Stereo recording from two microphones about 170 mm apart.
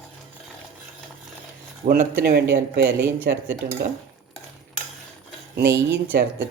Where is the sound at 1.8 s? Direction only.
50° right (ahead or behind).